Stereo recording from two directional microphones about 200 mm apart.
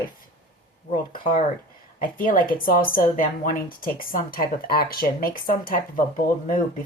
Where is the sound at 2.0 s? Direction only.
45° left (ahead or behind).